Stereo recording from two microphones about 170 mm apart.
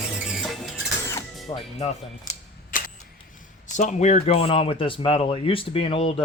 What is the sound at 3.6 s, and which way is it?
Speech, 45° left (ahead or behind).